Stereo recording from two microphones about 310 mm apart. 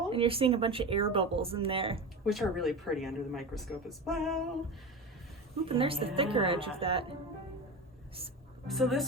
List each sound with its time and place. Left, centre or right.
0.1 s speech: centre
2.2 s a woman's voice: centre
5.6 s speech: centre
8.6 s a woman's voice: centre